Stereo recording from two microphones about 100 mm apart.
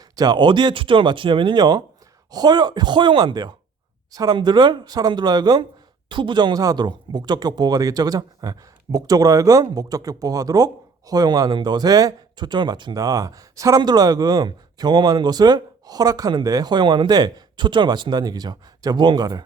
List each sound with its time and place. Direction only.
0.2 s speech: 45° right (ahead or behind)
4.4 s speech: 50° right (ahead or behind)
6.1 s speech: 55° right (ahead or behind)